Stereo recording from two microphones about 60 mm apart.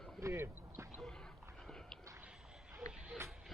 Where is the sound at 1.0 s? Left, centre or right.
Centre.